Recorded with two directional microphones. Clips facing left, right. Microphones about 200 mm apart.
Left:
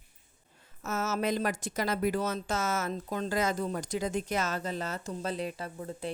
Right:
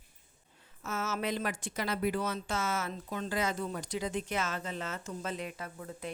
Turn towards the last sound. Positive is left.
turn(degrees=30)  # may be behind; listen again after turning